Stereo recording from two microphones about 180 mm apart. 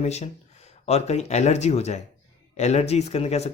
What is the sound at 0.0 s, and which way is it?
Speech, 35° left (ahead or behind).